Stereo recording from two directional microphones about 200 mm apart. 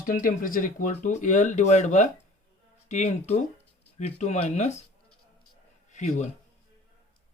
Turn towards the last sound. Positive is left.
turn(degrees=35)  # may be behind; listen again after turning